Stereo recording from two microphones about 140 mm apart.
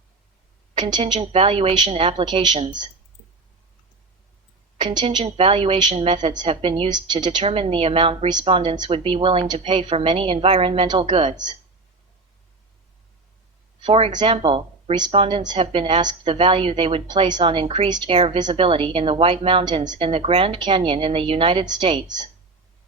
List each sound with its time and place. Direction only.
0.8 s a woman's voice: 35° right (ahead or behind)
2.2 s a woman's voice: 30° right (ahead or behind)
4.8 s a woman's voice: 35° right (ahead or behind)
6.1 s a woman's voice: 30° right (ahead or behind)
6.4 s a woman's voice: 40° right (ahead or behind)
7.4 s a woman's voice: 40° right (ahead or behind)
13.8 s a woman's voice: 40° right (ahead or behind)